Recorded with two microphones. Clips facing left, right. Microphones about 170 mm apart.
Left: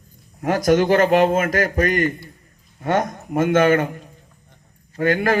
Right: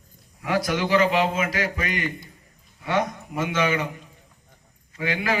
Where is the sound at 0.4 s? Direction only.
45° left (ahead or behind).